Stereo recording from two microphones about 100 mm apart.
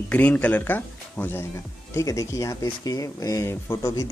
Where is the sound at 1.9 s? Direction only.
35° left (ahead or behind).